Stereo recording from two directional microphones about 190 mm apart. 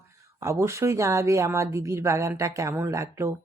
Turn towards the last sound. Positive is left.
turn(degrees=-15)  # may be behind; listen again after turning